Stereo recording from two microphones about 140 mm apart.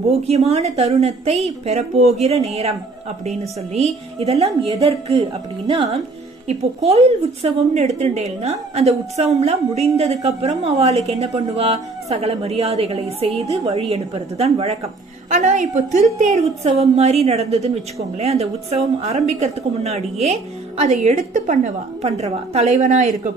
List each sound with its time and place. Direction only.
0.3 s a woman's voice: 50° right (ahead or behind)
6.4 s a woman's voice: 50° right (ahead or behind)
15.2 s a woman's voice: 60° right (ahead or behind)